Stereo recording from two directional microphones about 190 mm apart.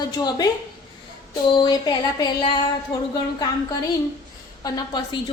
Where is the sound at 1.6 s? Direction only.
20° left (ahead or behind).